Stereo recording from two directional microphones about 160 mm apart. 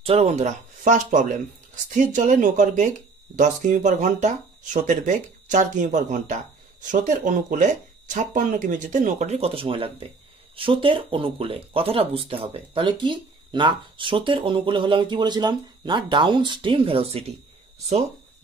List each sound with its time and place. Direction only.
0.0 s speech: 40° right (ahead or behind)